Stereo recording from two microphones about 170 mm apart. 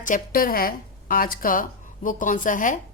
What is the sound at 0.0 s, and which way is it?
Speech, 55° left (ahead or behind).